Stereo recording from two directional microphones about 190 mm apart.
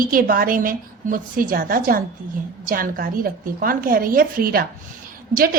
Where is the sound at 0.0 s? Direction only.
50° right (ahead or behind).